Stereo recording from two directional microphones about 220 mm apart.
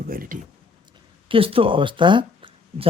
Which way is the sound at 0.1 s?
40° right (ahead or behind).